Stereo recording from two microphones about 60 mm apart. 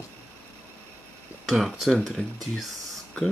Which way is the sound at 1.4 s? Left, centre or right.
Centre.